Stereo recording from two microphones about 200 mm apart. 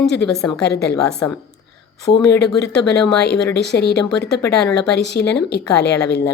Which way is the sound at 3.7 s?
55° left (ahead or behind).